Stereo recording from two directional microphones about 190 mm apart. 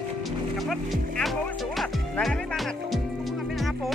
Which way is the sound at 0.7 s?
Centre (ahead or behind).